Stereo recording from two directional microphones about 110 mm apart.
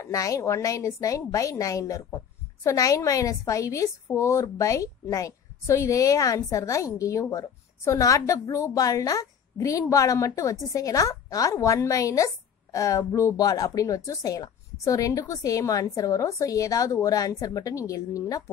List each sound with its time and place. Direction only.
0.0 s a woman's voice: 30° left (ahead or behind)